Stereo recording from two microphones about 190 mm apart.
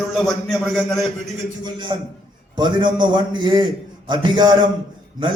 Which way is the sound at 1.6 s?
25° right (ahead or behind).